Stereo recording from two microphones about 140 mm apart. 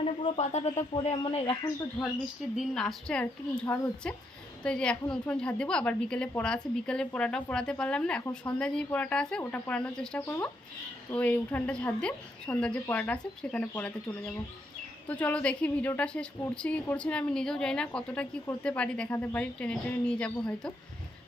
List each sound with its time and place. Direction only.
0.3 s speech: 50° left (ahead or behind)
0.9 s speech: 35° left (ahead or behind)
2.6 s a woman's voice: 5° left (ahead or behind)
10.2 s a woman's voice: 20° left (ahead or behind)